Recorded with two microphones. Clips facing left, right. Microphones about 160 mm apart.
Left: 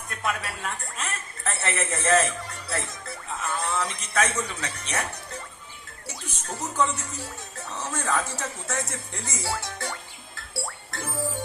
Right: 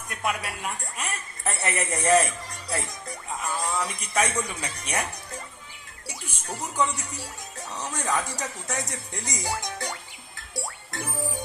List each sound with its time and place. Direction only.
0.1 s a woman's voice: 15° right (ahead or behind)
6.1 s speech: 10° right (ahead or behind)
10.3 s music: 15° right (ahead or behind)